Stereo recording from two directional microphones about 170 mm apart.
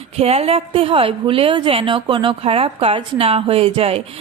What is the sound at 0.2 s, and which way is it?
A woman's voice, 35° right (ahead or behind).